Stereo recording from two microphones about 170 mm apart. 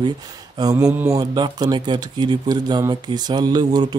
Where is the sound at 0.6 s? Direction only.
20° right (ahead or behind).